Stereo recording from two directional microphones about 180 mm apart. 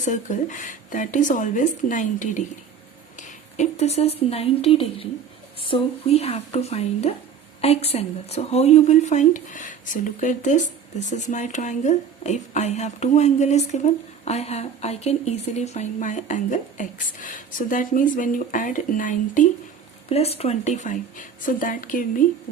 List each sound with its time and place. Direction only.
0.0 s a woman's voice: 45° left (ahead or behind)
20.1 s a woman's voice: 35° left (ahead or behind)